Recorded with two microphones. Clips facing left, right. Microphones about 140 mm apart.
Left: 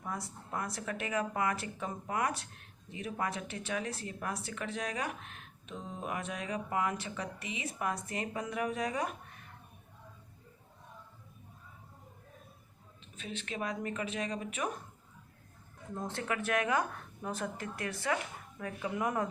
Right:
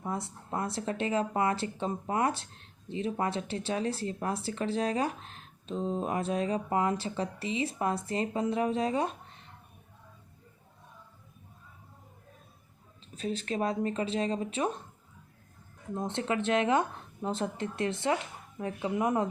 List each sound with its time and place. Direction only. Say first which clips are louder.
0.0 s speech: right 5 dB; 25° right (ahead or behind)
13.1 s speech: right 8 dB; 35° right (ahead or behind)
16.0 s speech: right 5 dB; 20° right (ahead or behind)